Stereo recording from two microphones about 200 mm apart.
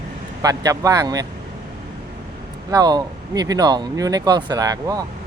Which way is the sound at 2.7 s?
20° right (ahead or behind).